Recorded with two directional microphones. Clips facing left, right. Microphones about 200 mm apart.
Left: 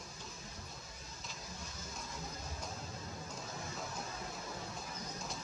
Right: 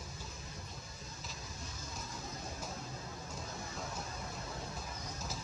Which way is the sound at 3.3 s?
Centre (ahead or behind).